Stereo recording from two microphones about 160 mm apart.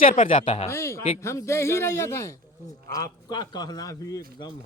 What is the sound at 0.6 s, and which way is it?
Speech, 15° left (ahead or behind).